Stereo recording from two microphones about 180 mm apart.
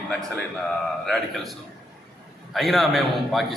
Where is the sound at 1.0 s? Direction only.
Centre (ahead or behind).